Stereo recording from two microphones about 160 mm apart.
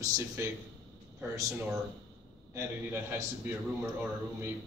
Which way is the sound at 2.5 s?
15° right (ahead or behind).